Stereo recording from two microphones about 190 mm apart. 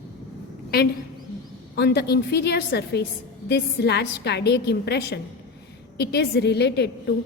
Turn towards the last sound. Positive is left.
turn(degrees=60)  # may be behind; listen again after turning